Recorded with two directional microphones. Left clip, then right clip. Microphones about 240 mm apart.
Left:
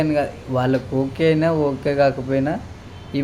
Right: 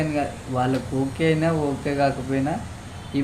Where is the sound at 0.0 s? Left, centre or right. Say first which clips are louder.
Left 5 dB; left.